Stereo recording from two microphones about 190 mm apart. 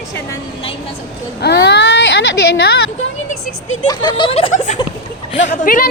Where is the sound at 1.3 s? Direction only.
60° left (ahead or behind).